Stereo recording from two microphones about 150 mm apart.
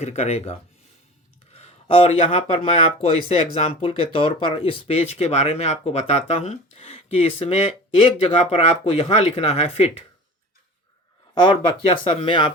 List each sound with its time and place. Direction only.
0.0 s speech: 45° left (ahead or behind)
11.4 s speech: 30° left (ahead or behind)